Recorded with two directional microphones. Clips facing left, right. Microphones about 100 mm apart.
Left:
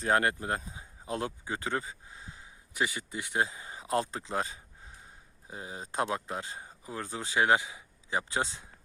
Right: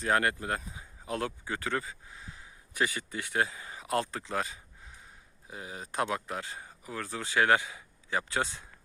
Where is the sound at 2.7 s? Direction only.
15° left (ahead or behind).